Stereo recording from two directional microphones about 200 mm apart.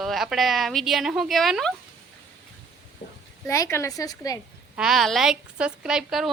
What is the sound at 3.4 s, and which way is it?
Speech, 15° left (ahead or behind).